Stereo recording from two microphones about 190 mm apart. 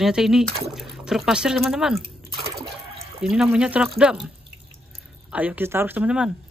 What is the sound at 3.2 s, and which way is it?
Speech, centre (ahead or behind).